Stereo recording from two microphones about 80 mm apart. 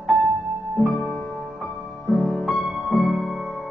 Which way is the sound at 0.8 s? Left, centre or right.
Centre.